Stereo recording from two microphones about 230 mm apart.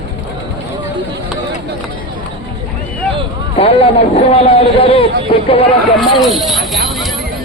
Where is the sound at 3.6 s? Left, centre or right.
Left.